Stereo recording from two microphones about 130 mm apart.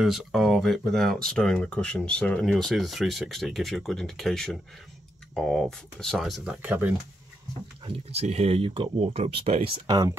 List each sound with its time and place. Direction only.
0.0 s speech: centre (ahead or behind)
6.6 s speech: 15° right (ahead or behind)
7.8 s speech: 55° right (ahead or behind)
9.8 s speech: 25° right (ahead or behind)